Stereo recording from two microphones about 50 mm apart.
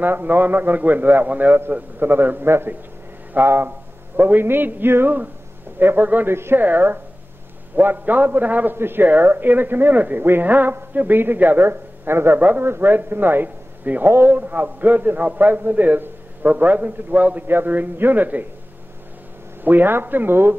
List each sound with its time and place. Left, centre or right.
0.0 s a man's voice: right
2.4 s a man's voice: right
6.3 s speech: right
6.6 s a man's voice: right
8.7 s a man's voice: right
12.4 s a man's voice: right
12.6 s a man's voice: right
19.6 s a man's voice: right